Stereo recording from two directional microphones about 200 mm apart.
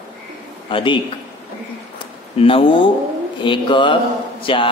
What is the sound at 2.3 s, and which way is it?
Speech, 25° left (ahead or behind).